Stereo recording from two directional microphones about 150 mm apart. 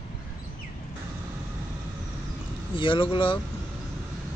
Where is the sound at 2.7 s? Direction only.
35° left (ahead or behind).